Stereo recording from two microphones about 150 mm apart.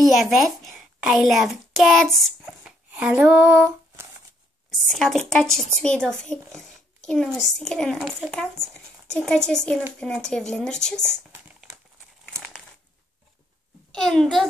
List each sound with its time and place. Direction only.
0.0 s a child's voice: centre (ahead or behind)
2.1 s a sound: centre (ahead or behind)
2.9 s a sound: 10° right (ahead or behind)
4.6 s a child's voice: centre (ahead or behind)
11.0 s crumpling: 15° right (ahead or behind)
12.3 s crumpling: 5° left (ahead or behind)
13.9 s a child's voice: 5° left (ahead or behind)